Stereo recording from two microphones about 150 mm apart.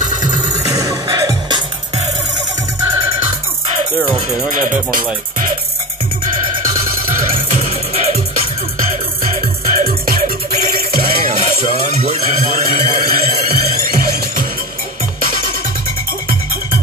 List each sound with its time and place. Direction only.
0.5 s music: 25° right (ahead or behind)
4.5 s music: 60° right (ahead or behind)
7.5 s music: 45° right (ahead or behind)
8.7 s music: 60° right (ahead or behind)